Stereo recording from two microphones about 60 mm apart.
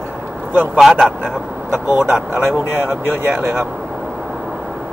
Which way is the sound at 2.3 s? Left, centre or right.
Right.